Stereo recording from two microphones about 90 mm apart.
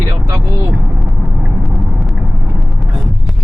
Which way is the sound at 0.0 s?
40° right (ahead or behind).